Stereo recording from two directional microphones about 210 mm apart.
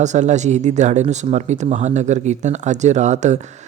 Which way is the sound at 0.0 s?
35° right (ahead or behind).